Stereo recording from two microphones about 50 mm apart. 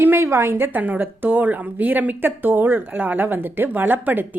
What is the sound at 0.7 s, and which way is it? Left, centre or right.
Speech, right.